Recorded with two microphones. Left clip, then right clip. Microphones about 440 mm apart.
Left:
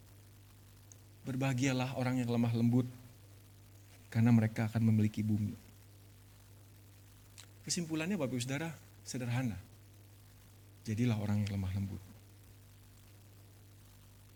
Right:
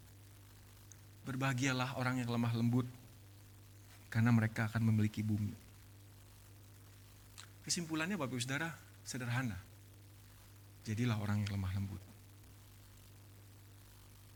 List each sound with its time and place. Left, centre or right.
0.9 s a man's voice: right
4.1 s speech: right
7.3 s speech: right
10.8 s speech: right